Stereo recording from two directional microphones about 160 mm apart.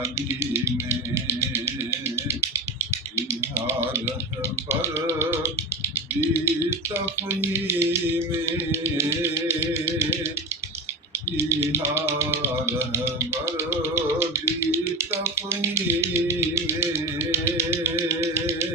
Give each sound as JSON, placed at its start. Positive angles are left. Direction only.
{"t": 0.0, "sound": "music", "side_deg": -15}
{"t": 11.4, "sound": "music", "side_deg": -15}